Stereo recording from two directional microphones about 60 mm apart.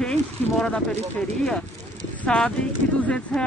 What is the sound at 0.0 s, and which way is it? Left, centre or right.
Speech, centre.